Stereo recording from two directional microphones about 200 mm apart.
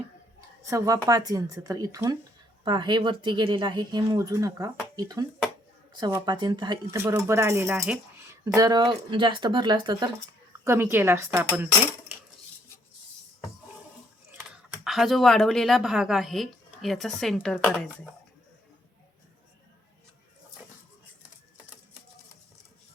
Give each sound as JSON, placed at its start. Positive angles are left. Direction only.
{"t": 0.6, "sound": "speech", "side_deg": -15}
{"t": 14.3, "sound": "speech", "side_deg": 0}